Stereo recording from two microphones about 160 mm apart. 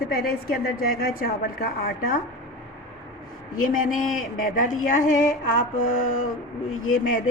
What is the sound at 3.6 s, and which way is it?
A woman's voice, 60° left (ahead or behind).